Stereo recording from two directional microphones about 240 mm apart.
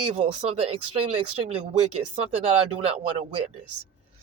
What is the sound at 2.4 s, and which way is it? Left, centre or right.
Speech, right.